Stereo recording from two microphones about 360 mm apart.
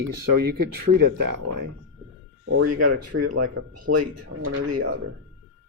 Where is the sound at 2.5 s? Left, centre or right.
Right.